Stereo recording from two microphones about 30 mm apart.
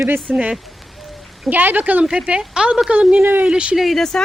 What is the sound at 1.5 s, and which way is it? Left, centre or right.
Speech, right.